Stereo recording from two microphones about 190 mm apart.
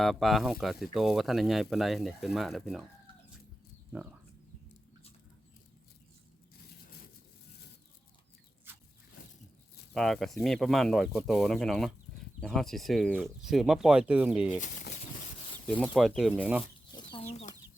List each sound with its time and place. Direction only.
0.0 s speech: centre (ahead or behind)
9.9 s speech: centre (ahead or behind)
16.0 s speech: centre (ahead or behind)
16.9 s chicken: 25° left (ahead or behind)